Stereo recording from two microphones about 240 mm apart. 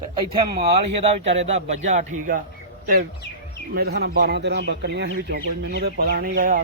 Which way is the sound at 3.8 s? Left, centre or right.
Right.